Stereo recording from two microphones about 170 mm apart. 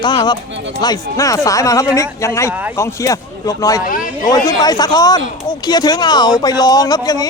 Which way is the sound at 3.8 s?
55° left (ahead or behind).